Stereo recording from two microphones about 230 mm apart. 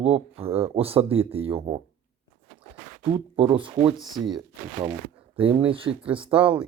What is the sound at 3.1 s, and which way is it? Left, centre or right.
Speech, right.